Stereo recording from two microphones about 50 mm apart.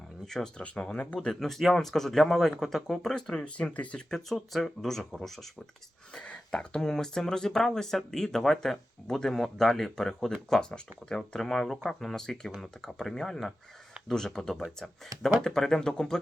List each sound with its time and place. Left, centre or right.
0.3 s speech: centre
0.6 s speech: left
1.3 s speech: centre
3.4 s speech: left
4.5 s speech: centre
6.1 s speech: centre